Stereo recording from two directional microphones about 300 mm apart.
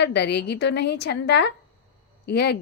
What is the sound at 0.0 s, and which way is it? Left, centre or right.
A woman's voice, left.